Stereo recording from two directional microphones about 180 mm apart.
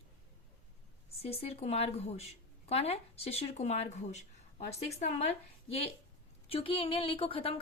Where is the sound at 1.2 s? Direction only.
35° left (ahead or behind).